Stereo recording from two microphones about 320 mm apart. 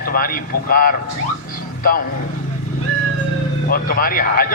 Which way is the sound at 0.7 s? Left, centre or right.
Left.